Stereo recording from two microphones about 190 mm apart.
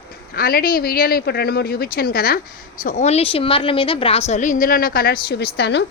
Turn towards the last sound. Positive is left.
turn(degrees=60)  # may be behind; listen again after turning